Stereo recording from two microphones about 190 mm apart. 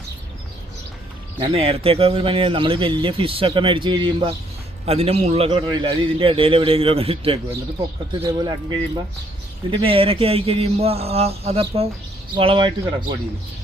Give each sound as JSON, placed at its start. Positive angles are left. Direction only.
{"t": 1.4, "sound": "a man's voice", "side_deg": -30}